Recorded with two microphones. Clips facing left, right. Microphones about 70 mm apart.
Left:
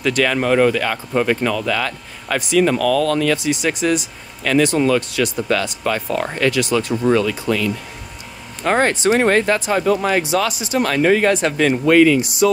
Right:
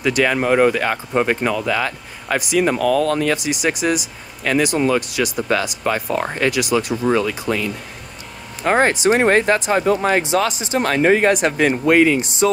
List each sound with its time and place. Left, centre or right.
0.0 s speech: centre
3.4 s speech: centre; by 12.4 s right